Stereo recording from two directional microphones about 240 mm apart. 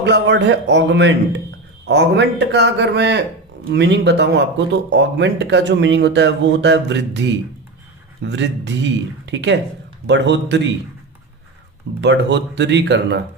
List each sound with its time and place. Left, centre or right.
0.0 s speech: right
11.9 s speech: right